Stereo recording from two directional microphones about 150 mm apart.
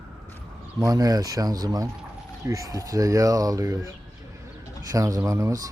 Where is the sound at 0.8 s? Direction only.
25° right (ahead or behind).